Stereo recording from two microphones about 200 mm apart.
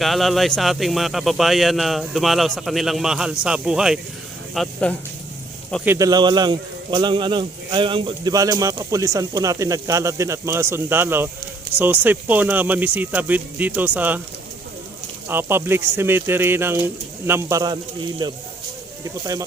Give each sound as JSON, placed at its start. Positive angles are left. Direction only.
{"t": 0.0, "sound": "speech", "side_deg": 0}
{"t": 5.8, "sound": "speech", "side_deg": -15}
{"t": 15.3, "sound": "speech", "side_deg": -10}